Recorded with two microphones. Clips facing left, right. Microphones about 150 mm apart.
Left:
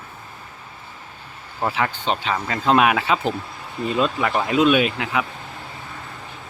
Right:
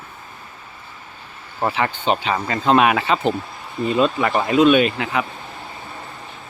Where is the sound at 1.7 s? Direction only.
Centre (ahead or behind).